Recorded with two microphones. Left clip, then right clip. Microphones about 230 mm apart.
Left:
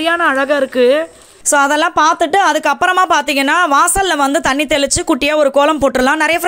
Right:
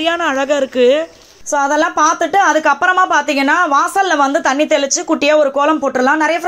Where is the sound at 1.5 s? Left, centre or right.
Left.